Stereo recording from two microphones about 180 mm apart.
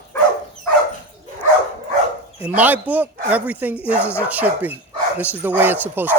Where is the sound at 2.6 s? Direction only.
10° right (ahead or behind).